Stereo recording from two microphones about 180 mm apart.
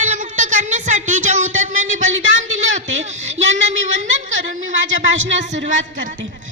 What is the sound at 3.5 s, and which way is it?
Speech, 40° right (ahead or behind).